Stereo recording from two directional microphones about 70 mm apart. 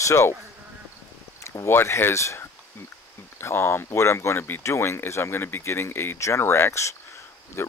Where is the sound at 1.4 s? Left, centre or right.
Left.